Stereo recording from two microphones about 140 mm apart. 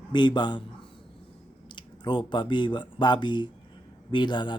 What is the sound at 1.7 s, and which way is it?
A man's voice, 35° left (ahead or behind).